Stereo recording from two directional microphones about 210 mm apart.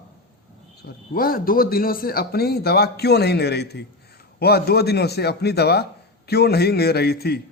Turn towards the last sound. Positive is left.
turn(degrees=50)  # may be behind; listen again after turning